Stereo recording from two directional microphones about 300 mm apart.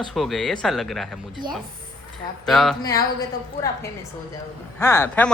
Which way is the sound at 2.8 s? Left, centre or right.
Centre.